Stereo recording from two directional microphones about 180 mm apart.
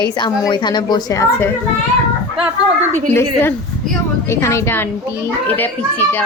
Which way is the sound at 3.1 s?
10° left (ahead or behind).